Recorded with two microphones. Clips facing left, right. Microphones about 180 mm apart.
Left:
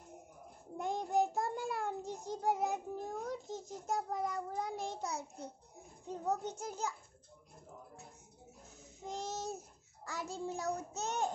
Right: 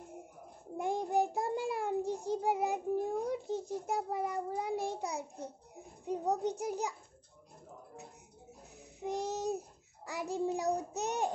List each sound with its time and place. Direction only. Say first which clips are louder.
0.7 s child singing: right 2 dB; 10° right (ahead or behind)
3.3 s a sound: right 6 dB; 10° right (ahead or behind)
3.8 s a child's voice: right 2 dB; 10° right (ahead or behind)
9.0 s a child's voice: right 6 dB; 15° right (ahead or behind)